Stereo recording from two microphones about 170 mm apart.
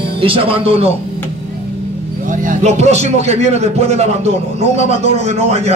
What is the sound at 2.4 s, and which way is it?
A man's voice, 45° right (ahead or behind).